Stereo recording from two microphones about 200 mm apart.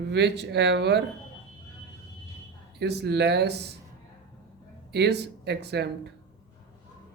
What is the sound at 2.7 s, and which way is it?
Speech, 55° right (ahead or behind).